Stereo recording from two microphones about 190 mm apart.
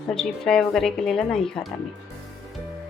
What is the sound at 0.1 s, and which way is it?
A woman's voice, centre (ahead or behind).